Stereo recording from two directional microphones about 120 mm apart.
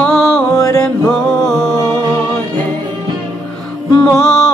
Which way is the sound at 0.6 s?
25° left (ahead or behind).